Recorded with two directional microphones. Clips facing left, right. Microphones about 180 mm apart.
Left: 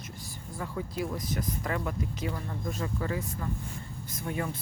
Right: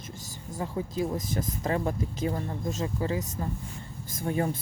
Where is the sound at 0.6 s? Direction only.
25° right (ahead or behind).